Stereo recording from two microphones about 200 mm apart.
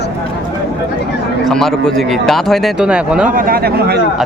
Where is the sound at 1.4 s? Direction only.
Centre (ahead or behind).